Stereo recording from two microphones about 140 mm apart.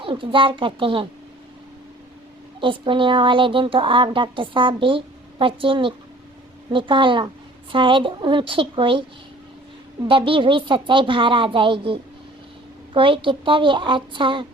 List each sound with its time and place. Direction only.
0.0 s speech: 40° right (ahead or behind)
2.6 s speech: 35° right (ahead or behind)
10.1 s speech: 40° right (ahead or behind)